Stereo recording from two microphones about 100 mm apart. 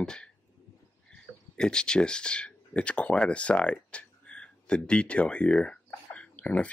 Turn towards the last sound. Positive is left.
turn(degrees=10)  # may be behind; listen again after turning